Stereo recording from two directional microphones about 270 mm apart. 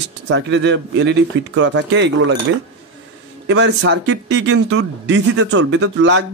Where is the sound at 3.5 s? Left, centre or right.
Right.